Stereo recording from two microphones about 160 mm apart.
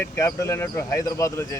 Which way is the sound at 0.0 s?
20° left (ahead or behind).